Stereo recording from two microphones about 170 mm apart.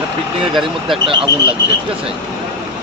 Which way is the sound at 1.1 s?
30° right (ahead or behind).